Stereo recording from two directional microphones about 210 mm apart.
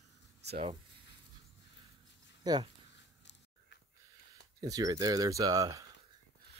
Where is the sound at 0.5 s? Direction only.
25° right (ahead or behind).